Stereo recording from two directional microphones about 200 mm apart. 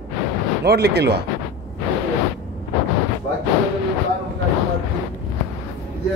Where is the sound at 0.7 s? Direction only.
55° right (ahead or behind).